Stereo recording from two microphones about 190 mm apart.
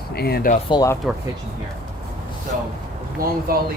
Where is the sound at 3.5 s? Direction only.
50° right (ahead or behind).